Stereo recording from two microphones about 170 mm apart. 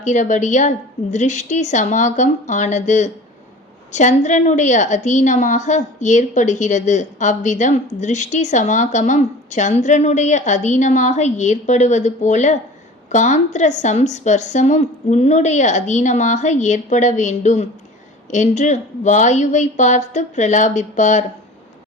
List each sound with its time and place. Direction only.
0.0 s a woman's voice: 45° left (ahead or behind)